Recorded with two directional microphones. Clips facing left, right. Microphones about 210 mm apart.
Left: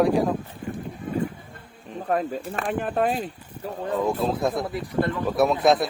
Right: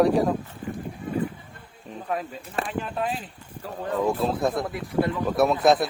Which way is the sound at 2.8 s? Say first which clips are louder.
Left 5 dB; 45° left (ahead or behind).